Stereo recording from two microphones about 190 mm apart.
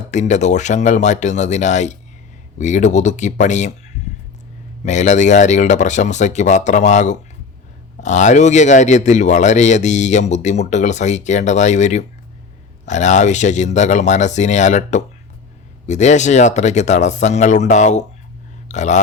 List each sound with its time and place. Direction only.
0.1 s speech: 40° left (ahead or behind)